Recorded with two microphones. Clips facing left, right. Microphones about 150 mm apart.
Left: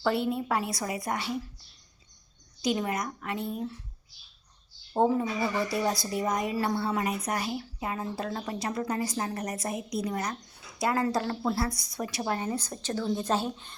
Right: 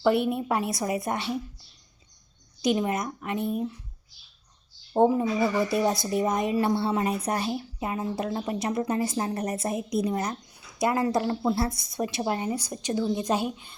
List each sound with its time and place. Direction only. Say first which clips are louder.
0.0 s a woman's voice: right 4 dB; 20° right (ahead or behind)
2.6 s a woman's voice: right 4 dB; 25° right (ahead or behind)
4.9 s a woman's voice: right 4 dB; 20° right (ahead or behind)